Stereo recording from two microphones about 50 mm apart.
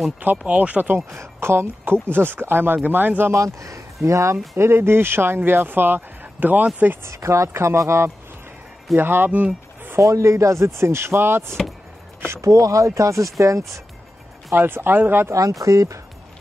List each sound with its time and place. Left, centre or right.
0.5 s speech: right
0.9 s speech: right
2.0 s speech: right
2.8 s speech: right
3.3 s speech: right
4.6 s speech: right
7.1 s speech: right
8.9 s speech: right
9.9 s speech: right
12.3 s speech: right
14.5 s speech: right
15.6 s speech: right